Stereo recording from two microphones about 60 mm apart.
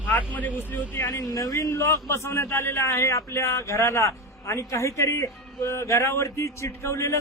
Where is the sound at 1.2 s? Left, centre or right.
Left.